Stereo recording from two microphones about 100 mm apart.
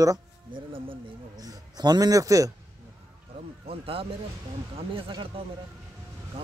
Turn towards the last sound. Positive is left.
turn(degrees=-70)  # may be behind; listen again after turning